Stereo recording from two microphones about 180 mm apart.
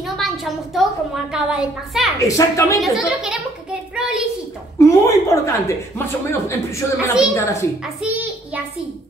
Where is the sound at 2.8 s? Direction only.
Centre (ahead or behind).